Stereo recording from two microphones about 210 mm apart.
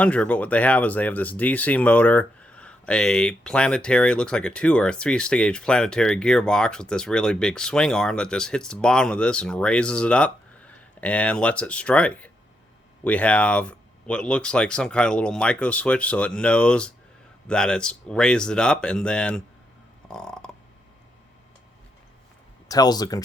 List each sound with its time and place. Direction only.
0.0 s speech: 5° left (ahead or behind)
20.1 s burping: 5° left (ahead or behind)
22.7 s speech: 20° left (ahead or behind)